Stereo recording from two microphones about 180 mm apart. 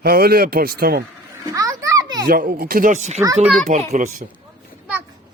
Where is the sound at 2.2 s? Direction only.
50° right (ahead or behind).